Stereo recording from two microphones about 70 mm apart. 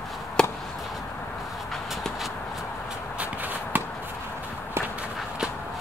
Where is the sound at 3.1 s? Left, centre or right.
Right.